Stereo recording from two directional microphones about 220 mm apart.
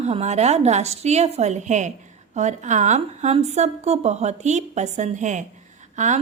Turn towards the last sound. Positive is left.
turn(degrees=-35)  # may be behind; listen again after turning